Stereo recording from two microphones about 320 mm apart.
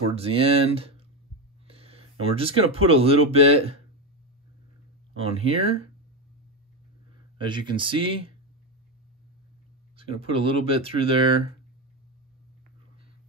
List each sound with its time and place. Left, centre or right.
0.1 s speech: centre
5.2 s speech: centre
7.3 s speech: centre
9.9 s speech: centre